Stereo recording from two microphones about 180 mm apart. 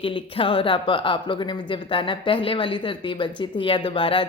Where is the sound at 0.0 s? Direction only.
30° left (ahead or behind).